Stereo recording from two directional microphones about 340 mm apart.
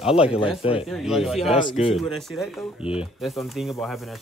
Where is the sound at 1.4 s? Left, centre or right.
Centre.